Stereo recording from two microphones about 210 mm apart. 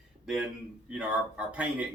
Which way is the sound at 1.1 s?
5° right (ahead or behind).